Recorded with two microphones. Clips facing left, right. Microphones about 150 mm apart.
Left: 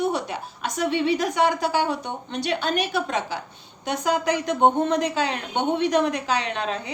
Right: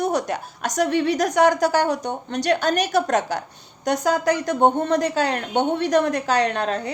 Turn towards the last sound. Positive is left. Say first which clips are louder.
# right 6 dB
turn(degrees=-45)  # may be behind; listen again after turning